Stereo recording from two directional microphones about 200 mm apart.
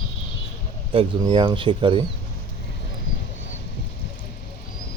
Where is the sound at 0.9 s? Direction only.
25° right (ahead or behind).